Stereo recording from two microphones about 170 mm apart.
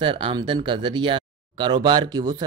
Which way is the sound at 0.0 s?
30° right (ahead or behind).